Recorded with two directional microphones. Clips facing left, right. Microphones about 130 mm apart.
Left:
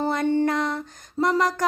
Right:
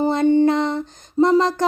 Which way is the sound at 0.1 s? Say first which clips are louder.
Right 7 dB; 20° right (ahead or behind).